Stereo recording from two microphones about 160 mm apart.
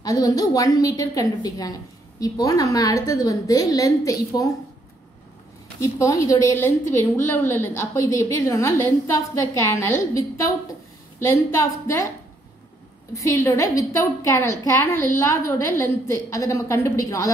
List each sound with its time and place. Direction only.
0.0 s a woman's voice: 25° left (ahead or behind)
5.8 s a woman's voice: 20° left (ahead or behind)
13.1 s a woman's voice: 20° left (ahead or behind)